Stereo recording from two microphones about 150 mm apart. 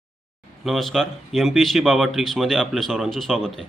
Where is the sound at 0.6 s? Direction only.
Centre (ahead or behind).